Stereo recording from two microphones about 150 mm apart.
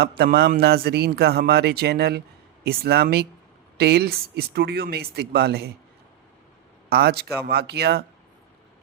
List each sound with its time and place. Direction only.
0.2 s speech: 90° right
6.9 s speech: 90° right